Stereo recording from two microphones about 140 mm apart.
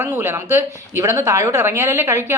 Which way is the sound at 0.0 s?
20° right (ahead or behind).